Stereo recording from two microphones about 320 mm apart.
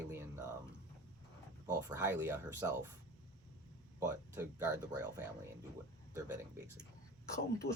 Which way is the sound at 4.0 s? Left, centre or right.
Centre.